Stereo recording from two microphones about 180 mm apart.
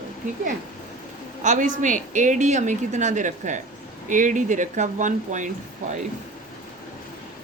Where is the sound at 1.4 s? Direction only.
45° right (ahead or behind).